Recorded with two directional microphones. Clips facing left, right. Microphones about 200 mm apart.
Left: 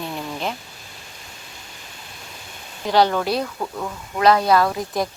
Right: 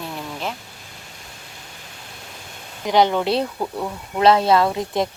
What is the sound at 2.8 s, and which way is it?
A woman's voice, 20° right (ahead or behind).